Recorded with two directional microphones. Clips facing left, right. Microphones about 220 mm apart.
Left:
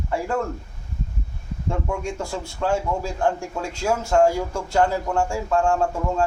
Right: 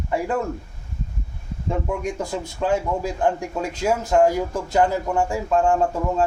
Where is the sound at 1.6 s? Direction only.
20° right (ahead or behind).